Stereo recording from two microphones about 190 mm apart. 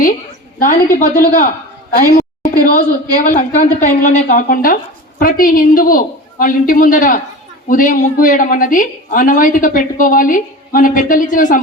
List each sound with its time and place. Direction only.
0.6 s a woman's voice: 45° left (ahead or behind)
2.1 s a sound: 45° left (ahead or behind)
3.2 s a woman's voice: 45° left (ahead or behind)